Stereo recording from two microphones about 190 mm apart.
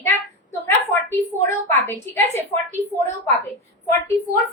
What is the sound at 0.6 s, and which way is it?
Speech, 10° left (ahead or behind).